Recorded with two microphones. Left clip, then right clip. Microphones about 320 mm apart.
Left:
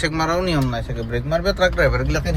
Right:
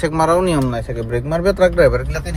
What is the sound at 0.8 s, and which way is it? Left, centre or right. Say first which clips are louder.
Speech: right 4 dB; right.